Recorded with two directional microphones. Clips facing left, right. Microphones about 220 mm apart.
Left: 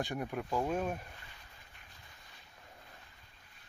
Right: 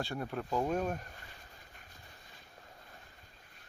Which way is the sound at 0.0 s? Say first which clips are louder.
Left 1 dB; 15° left (ahead or behind).